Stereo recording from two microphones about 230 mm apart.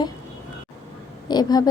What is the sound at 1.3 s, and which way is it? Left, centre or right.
Speech, centre.